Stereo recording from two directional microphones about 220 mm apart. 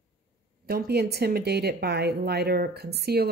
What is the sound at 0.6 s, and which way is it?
Speech, 45° right (ahead or behind).